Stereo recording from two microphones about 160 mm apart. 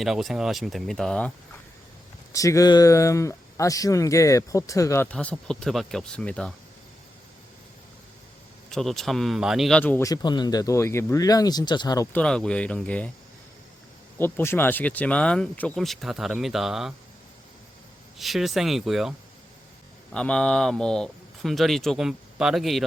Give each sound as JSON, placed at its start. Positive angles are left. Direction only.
{"t": 0.0, "sound": "speech", "side_deg": 0}
{"t": 2.3, "sound": "speech", "side_deg": 20}
{"t": 5.0, "sound": "speech", "side_deg": 5}
{"t": 8.7, "sound": "speech", "side_deg": 0}
{"t": 10.1, "sound": "speech", "side_deg": 25}
{"t": 12.1, "sound": "speech", "side_deg": 5}
{"t": 14.2, "sound": "speech", "side_deg": 15}
{"t": 18.2, "sound": "speech", "side_deg": 0}
{"t": 20.1, "sound": "speech", "side_deg": 5}